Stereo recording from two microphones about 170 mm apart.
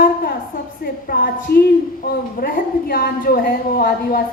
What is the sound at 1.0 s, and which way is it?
A woman's voice, 55° left (ahead or behind).